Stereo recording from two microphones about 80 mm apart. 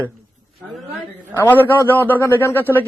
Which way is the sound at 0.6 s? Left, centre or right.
Centre.